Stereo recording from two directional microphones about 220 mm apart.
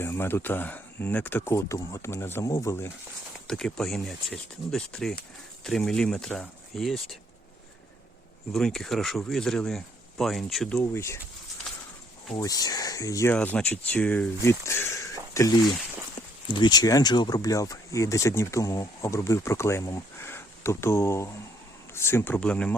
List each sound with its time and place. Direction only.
0.0 s speech: 10° left (ahead or behind)
8.5 s speech: centre (ahead or behind)
12.3 s speech: 15° left (ahead or behind)